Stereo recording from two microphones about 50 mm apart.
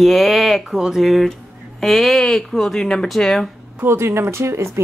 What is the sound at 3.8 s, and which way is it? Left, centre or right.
Speech, right.